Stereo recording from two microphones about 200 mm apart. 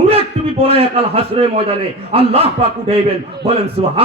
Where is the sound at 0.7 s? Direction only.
30° right (ahead or behind).